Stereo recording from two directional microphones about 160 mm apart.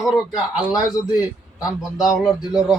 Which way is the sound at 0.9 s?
25° left (ahead or behind).